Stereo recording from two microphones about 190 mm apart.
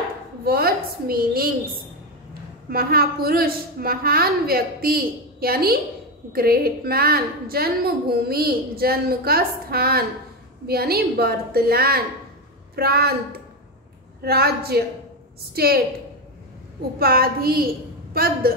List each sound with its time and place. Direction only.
0.5 s a woman's voice: 55° right (ahead or behind)
2.7 s a woman's voice: 55° right (ahead or behind)
14.2 s a woman's voice: 55° right (ahead or behind)
17.0 s a woman's voice: 50° right (ahead or behind)